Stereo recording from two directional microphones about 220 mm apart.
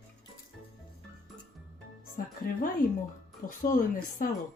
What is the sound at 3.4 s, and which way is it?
Speech, 40° left (ahead or behind).